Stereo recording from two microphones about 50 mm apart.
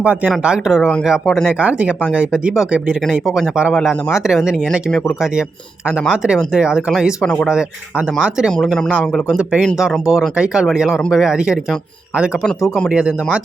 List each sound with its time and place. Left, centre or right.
0.7 s speech: centre
1.3 s speech: centre
1.6 s speech: right
3.8 s speech: centre
6.1 s speech: centre
9.8 s speech: centre
10.3 s speech: centre
12.9 s speech: centre